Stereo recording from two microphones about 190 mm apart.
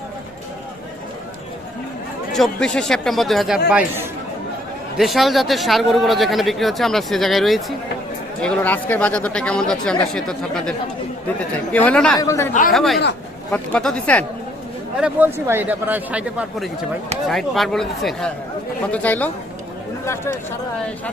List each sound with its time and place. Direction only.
2.3 s speech: centre (ahead or behind)
11.9 s speech: 5° left (ahead or behind)
12.1 s speech: 15° left (ahead or behind)
12.7 s speech: centre (ahead or behind)
14.9 s speech: 10° right (ahead or behind); by 19.3 s 10° left (ahead or behind)